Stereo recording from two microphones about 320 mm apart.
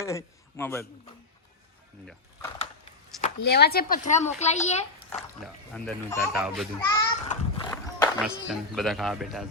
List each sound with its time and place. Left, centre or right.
0.0 s a man's voice: centre
3.2 s speech: left
5.4 s speech: centre
7.3 s horse: centre
8.4 s speech: centre